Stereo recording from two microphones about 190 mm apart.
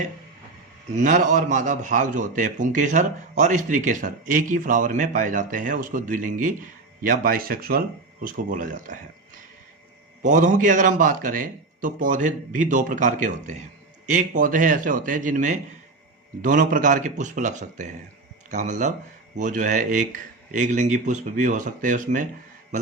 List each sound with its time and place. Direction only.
0.9 s a man's voice: 40° right (ahead or behind)
10.2 s a man's voice: 40° right (ahead or behind)